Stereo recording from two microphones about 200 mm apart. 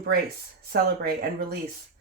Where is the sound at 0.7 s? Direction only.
50° right (ahead or behind).